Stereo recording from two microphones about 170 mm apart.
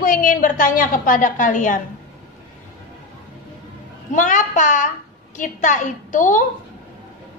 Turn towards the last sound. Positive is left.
turn(degrees=50)  # may be behind; listen again after turning